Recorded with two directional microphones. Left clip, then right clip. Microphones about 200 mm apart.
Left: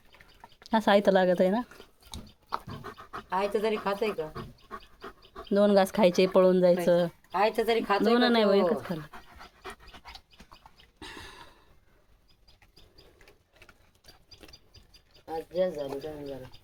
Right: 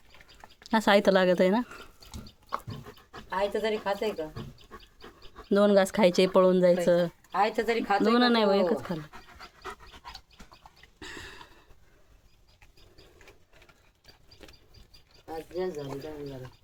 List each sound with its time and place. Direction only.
0.2 s speech: 5° right (ahead or behind)
2.8 s pant: 50° left (ahead or behind)
4.7 s dog: 45° left (ahead or behind)
5.5 s speech: 15° right (ahead or behind)
5.7 s speech: centre (ahead or behind)
7.3 s speech: 35° left (ahead or behind)
8.0 s speech: 5° right (ahead or behind)
9.6 s dog: 10° right (ahead or behind)
11.0 s a sound: 5° right (ahead or behind)
14.0 s a sound: centre (ahead or behind)
15.3 s wild animals: 50° left (ahead or behind)